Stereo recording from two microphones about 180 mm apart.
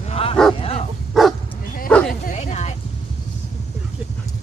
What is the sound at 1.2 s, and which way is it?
Bow-wow, centre (ahead or behind).